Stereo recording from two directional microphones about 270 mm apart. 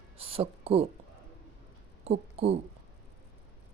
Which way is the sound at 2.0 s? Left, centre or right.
Right.